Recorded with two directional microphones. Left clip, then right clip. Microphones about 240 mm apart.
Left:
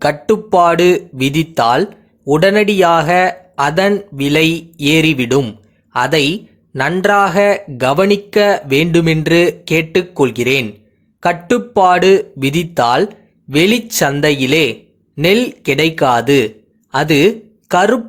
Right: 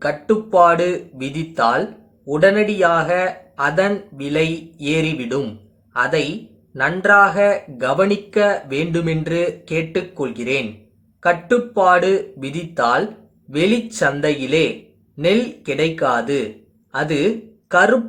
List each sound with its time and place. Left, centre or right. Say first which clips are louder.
0.0 s speech: left 5 dB; left